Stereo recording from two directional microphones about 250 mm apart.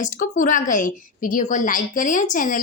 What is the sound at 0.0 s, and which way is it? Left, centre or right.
A woman's voice, left.